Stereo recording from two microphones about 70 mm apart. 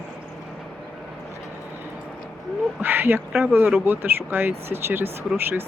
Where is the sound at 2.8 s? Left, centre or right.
Right.